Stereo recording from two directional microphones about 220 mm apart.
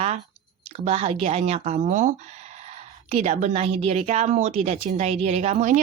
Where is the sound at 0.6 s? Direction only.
30° right (ahead or behind).